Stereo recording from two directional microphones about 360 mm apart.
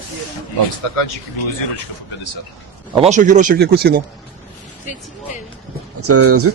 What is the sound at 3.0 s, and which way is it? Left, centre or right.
Speech, centre.